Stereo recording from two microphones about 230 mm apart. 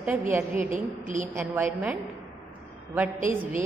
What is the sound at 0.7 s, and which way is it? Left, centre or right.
Speech, right.